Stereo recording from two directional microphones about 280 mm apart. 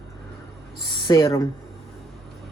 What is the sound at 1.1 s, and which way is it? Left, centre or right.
Speech, centre.